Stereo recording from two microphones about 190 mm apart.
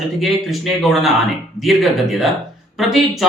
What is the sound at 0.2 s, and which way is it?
Speech, centre (ahead or behind).